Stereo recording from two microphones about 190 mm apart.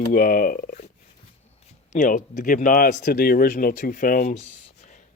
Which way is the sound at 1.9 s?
45° left (ahead or behind).